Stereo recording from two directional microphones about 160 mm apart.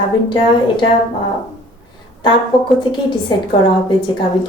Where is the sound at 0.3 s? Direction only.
30° left (ahead or behind).